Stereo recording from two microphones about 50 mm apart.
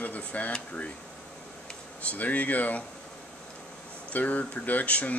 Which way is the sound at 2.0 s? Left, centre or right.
Left.